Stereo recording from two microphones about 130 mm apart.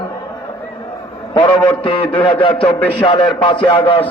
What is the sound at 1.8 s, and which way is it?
Speech, 40° left (ahead or behind).